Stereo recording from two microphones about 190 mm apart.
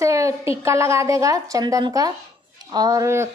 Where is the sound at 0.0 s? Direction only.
15° right (ahead or behind).